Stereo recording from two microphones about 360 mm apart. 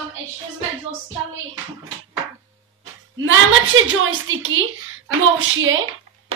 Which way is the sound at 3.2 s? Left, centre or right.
Right.